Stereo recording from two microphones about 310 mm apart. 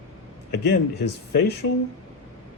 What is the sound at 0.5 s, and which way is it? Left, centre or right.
Speech, left.